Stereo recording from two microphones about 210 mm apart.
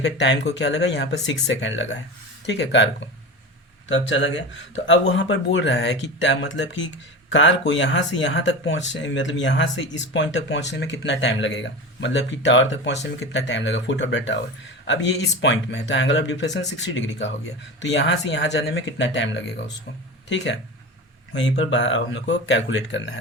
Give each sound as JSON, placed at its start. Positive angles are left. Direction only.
{"t": 0.0, "sound": "speech", "side_deg": 55}
{"t": 21.6, "sound": "speech", "side_deg": 65}